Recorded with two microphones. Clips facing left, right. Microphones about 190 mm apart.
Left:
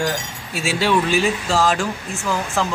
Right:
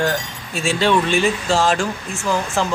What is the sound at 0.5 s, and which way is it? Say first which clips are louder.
Speech: right 2 dB; 5° left (ahead or behind).